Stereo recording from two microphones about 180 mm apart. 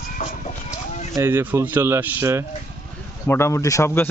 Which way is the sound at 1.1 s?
15° right (ahead or behind).